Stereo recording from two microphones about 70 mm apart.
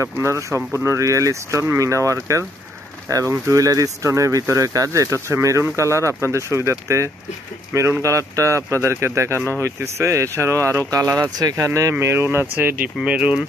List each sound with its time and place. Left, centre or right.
0.0 s speech: right
11.2 s speech: right
11.9 s speech: right
13.0 s speech: centre